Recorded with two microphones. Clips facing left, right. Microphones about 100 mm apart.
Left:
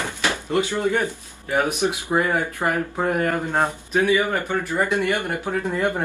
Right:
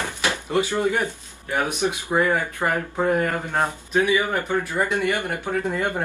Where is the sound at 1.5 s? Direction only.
5° left (ahead or behind).